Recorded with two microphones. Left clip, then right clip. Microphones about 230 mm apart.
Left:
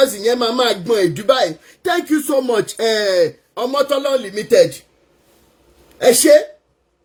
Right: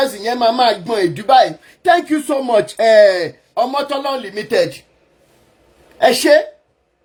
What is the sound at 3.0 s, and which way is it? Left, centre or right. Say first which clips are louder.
A man's voice: right 3 dB; right.